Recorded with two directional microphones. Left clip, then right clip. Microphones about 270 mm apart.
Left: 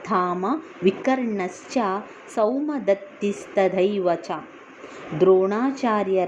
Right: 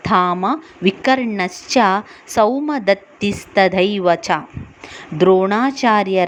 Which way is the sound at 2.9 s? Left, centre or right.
Right.